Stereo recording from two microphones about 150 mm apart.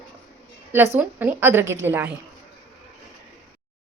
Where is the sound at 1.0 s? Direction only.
15° right (ahead or behind).